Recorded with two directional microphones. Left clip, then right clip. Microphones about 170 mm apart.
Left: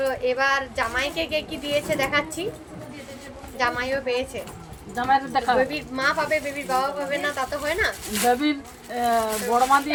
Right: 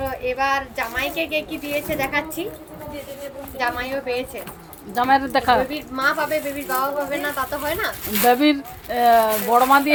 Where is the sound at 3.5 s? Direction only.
Centre (ahead or behind).